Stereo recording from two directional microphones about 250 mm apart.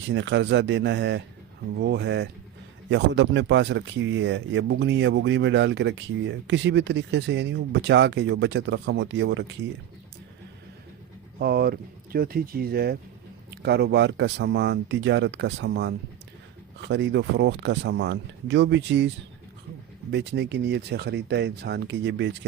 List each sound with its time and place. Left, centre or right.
0.1 s speech: right
11.3 s speech: right